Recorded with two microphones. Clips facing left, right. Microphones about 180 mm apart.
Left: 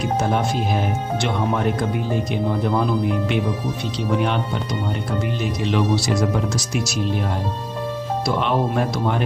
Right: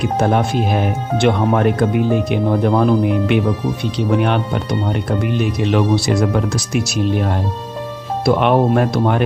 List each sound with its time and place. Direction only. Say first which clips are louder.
0.2 s speech: right 7 dB; 60° right (ahead or behind)
8.2 s speech: right 8 dB; 60° right (ahead or behind)